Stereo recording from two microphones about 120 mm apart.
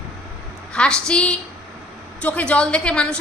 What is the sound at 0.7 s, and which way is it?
A woman's voice, 5° left (ahead or behind).